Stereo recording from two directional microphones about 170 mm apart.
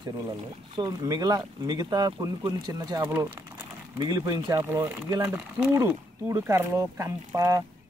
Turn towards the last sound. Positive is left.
turn(degrees=-15)  # may be behind; listen again after turning